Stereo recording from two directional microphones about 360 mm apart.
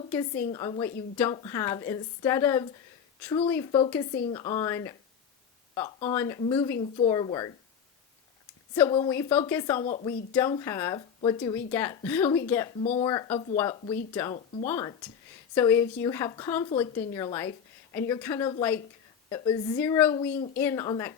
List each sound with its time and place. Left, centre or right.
0.5 s speech: centre
8.7 s speech: centre
9.8 s speech: centre
10.1 s speech: centre